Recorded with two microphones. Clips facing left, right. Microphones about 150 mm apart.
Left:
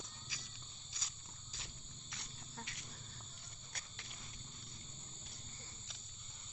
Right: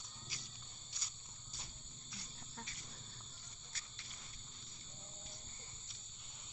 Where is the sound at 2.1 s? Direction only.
70° left (ahead or behind).